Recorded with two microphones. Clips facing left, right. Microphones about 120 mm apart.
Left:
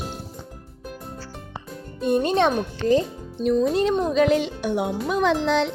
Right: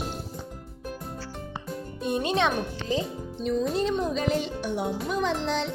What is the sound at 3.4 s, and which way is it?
Speech, 65° left (ahead or behind).